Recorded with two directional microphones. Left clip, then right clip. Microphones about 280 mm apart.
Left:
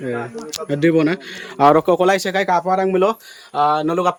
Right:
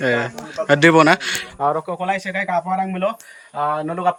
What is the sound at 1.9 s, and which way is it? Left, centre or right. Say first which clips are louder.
Speech: left 6 dB; centre.